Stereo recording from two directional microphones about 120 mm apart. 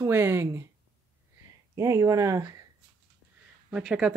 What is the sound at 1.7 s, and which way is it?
Speech, 25° right (ahead or behind).